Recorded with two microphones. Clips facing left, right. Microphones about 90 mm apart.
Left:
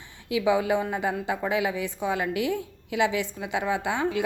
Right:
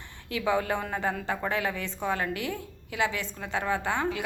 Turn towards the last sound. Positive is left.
turn(degrees=20)  # may be behind; listen again after turning